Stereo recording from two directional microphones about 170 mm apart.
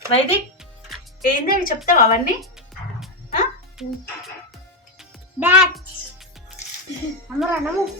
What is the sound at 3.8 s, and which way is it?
Music, centre (ahead or behind).